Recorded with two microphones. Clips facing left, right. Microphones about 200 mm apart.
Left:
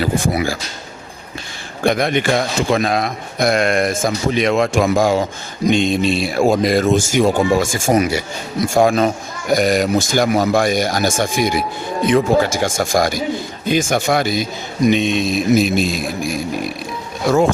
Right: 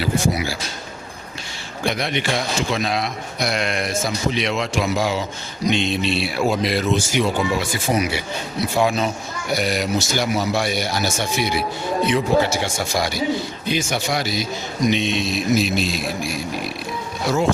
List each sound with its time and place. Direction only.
0.0 s a man's voice: 50° left (ahead or behind)
1.8 s a man's voice: 50° left (ahead or behind)